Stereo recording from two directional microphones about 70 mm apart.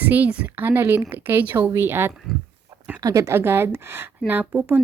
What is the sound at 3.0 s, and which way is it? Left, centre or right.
Speech, right.